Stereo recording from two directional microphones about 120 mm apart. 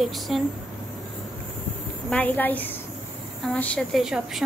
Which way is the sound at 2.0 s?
10° left (ahead or behind).